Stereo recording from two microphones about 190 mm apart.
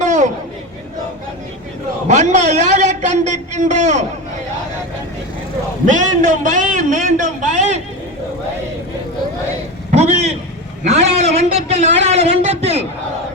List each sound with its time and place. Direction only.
0.0 s a sound: 40° right (ahead or behind)
2.0 s a man's voice: 40° right (ahead or behind)
5.8 s a man's voice: 40° right (ahead or behind)
9.9 s vehicle: 35° right (ahead or behind)
10.8 s a man's voice: 35° right (ahead or behind)